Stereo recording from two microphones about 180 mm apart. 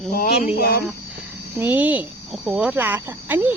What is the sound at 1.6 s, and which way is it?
A woman's voice, 10° right (ahead or behind).